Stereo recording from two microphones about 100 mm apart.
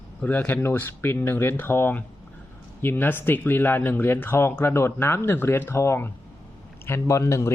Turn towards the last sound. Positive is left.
turn(degrees=30)  # may be behind; listen again after turning